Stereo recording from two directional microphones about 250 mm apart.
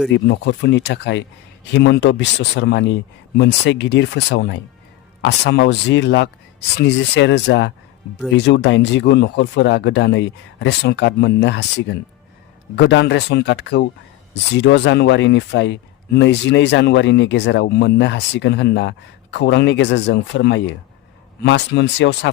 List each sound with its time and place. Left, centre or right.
0.1 s speech: left